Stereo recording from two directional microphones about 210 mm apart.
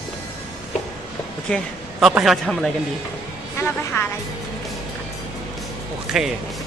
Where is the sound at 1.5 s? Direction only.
Centre (ahead or behind).